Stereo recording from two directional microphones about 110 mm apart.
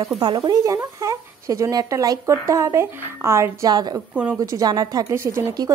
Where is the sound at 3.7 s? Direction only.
35° right (ahead or behind).